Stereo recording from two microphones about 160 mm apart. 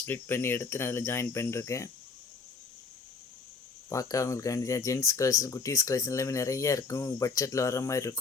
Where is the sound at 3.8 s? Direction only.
20° left (ahead or behind).